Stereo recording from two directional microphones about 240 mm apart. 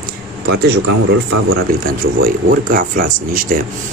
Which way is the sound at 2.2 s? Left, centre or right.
Right.